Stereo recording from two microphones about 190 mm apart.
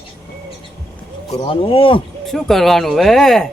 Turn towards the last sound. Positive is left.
turn(degrees=0)  # may be behind; listen again after turning